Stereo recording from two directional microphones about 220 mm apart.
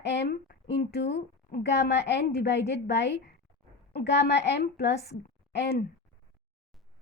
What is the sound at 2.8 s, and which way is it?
A woman's voice, 50° left (ahead or behind).